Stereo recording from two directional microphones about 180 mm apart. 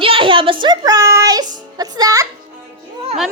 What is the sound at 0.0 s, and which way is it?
Child singing, 30° right (ahead or behind).